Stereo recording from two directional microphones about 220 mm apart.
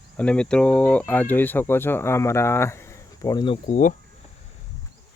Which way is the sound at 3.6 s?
35° left (ahead or behind).